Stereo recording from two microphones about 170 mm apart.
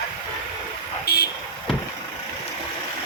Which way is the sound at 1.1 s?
70° left (ahead or behind).